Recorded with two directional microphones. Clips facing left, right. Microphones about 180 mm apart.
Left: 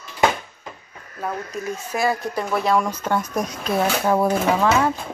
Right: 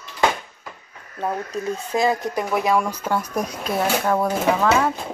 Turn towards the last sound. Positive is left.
turn(degrees=5)  # may be behind; listen again after turning